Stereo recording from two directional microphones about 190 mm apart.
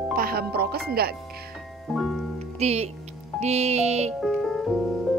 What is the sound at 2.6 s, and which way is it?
Music, 35° right (ahead or behind).